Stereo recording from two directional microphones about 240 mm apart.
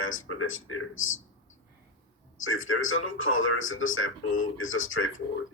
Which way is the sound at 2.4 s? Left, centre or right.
Left.